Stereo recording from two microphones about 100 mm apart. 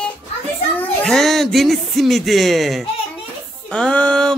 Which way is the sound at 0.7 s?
5° left (ahead or behind).